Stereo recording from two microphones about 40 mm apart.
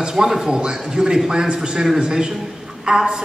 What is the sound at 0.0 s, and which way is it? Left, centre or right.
Speech, centre.